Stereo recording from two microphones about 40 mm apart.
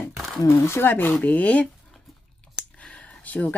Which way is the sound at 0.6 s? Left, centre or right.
Left.